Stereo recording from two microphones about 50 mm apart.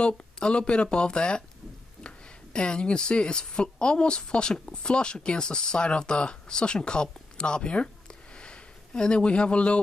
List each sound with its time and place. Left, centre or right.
0.0 s speech: centre